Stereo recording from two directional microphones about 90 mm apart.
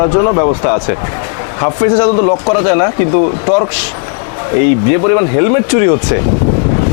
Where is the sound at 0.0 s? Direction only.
30° left (ahead or behind).